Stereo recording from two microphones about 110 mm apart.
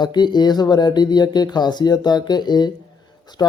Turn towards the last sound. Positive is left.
turn(degrees=35)  # may be behind; listen again after turning